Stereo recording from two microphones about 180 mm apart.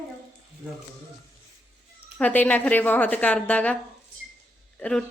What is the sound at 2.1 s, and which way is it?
A woman's voice, 10° left (ahead or behind).